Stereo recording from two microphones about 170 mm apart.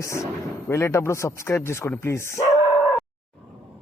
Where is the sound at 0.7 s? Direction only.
15° left (ahead or behind).